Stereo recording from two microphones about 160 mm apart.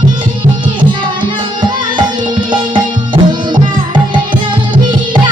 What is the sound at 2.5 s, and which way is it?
Music, 30° right (ahead or behind).